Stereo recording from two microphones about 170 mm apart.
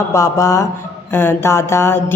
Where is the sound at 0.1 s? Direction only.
20° left (ahead or behind).